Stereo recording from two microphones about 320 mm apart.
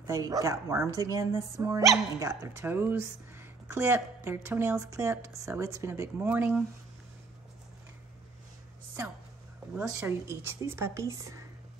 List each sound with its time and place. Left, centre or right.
0.0 s speech: centre
9.8 s speech: centre